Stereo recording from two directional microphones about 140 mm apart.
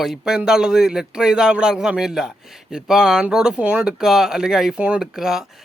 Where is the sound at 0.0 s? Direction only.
5° right (ahead or behind).